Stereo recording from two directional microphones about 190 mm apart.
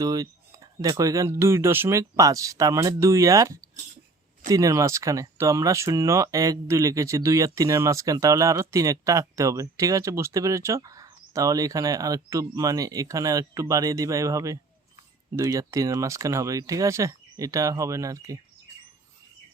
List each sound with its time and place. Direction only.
0.0 s speech: 20° right (ahead or behind)